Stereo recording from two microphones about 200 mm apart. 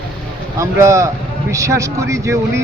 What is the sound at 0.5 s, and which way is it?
Speech, 15° right (ahead or behind).